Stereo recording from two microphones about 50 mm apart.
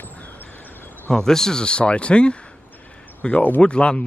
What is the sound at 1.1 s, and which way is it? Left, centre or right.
Speech, centre.